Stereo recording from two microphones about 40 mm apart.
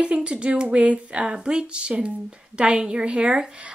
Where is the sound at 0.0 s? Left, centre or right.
Right.